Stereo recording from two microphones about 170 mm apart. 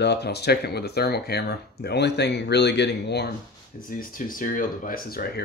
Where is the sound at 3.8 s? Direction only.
55° left (ahead or behind).